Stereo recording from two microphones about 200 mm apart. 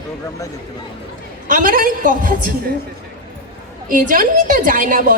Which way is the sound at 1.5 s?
45° right (ahead or behind).